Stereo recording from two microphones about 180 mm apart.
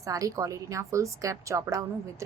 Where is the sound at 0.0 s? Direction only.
20° right (ahead or behind).